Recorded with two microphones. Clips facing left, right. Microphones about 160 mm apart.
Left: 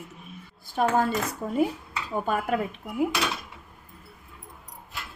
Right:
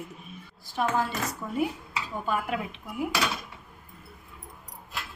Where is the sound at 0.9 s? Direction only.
40° left (ahead or behind).